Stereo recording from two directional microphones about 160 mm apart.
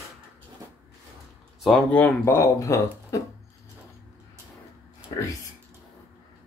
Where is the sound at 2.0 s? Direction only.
15° left (ahead or behind).